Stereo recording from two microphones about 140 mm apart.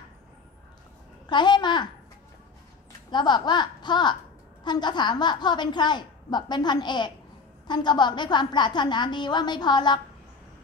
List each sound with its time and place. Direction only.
1.3 s a woman's voice: 30° left (ahead or behind)
3.1 s a woman's voice: 30° left (ahead or behind)